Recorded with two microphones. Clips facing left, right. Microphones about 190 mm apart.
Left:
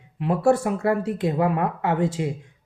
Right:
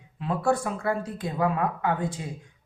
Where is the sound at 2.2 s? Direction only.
75° left (ahead or behind).